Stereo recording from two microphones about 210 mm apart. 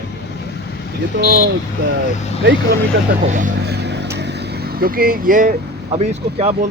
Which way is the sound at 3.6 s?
55° right (ahead or behind).